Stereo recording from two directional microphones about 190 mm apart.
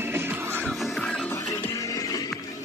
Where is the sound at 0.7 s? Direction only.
Centre (ahead or behind); by 2.3 s 20° left (ahead or behind).